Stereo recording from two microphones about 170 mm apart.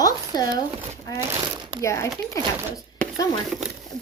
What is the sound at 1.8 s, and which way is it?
Speech, 15° left (ahead or behind).